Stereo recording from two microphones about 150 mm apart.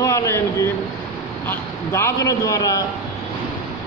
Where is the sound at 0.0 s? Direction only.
20° left (ahead or behind).